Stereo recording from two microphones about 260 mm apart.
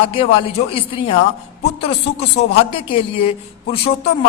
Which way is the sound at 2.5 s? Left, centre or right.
Left.